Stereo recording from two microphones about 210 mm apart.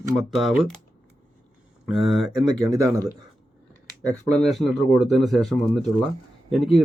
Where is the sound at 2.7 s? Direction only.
15° right (ahead or behind).